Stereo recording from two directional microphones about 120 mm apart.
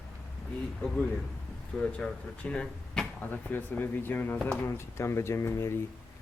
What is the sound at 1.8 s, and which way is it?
Speech, 10° left (ahead or behind).